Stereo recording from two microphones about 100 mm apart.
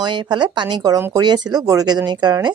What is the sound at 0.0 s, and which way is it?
A woman's voice, 50° right (ahead or behind).